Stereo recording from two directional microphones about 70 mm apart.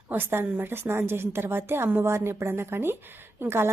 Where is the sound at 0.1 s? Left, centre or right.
Right.